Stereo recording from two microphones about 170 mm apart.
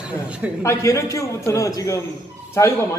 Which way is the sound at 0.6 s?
20° left (ahead or behind).